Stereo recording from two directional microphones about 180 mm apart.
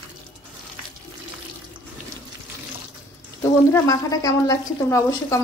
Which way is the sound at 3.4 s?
20° left (ahead or behind).